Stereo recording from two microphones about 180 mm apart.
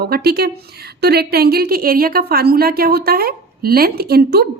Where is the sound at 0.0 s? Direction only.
60° right (ahead or behind).